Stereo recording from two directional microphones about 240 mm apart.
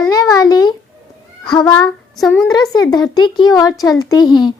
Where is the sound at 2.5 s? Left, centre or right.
Centre.